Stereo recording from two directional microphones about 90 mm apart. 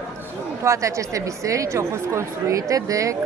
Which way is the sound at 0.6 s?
35° right (ahead or behind).